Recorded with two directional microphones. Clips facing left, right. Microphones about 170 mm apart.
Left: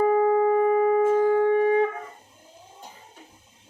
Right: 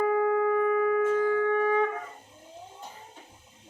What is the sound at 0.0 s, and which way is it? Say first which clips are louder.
Shofar: left 5 dB; 25° left (ahead or behind).